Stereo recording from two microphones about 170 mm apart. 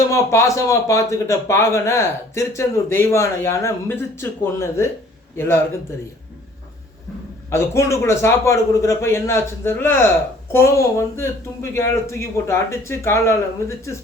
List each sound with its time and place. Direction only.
0.1 s speech: 15° left (ahead or behind)
7.5 s speech: 15° left (ahead or behind)